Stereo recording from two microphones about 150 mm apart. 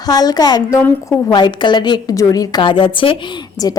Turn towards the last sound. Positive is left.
turn(degrees=25)  # may be behind; listen again after turning